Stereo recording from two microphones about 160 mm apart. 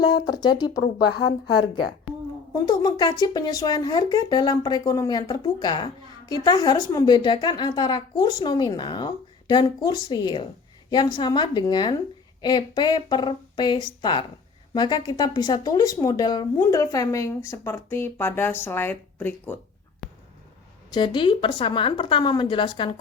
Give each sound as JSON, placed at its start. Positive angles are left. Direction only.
{"t": 0.4, "sound": "speech", "side_deg": 25}
{"t": 2.6, "sound": "speech", "side_deg": 25}
{"t": 20.0, "sound": "a sound", "side_deg": 0}
{"t": 20.9, "sound": "a woman's voice", "side_deg": 30}